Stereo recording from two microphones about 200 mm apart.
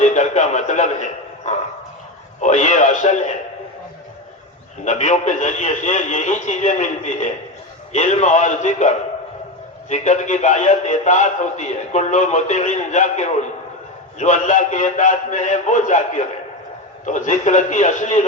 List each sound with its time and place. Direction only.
0.0 s radio: 35° left (ahead or behind)
2.4 s a man's voice: 35° left (ahead or behind)
4.9 s a man's voice: 35° left (ahead or behind)